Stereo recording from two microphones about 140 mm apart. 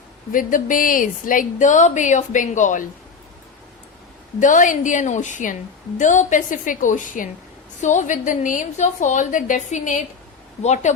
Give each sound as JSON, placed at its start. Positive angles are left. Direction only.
{"t": 0.3, "sound": "a woman's voice", "side_deg": 75}
{"t": 4.4, "sound": "a woman's voice", "side_deg": 65}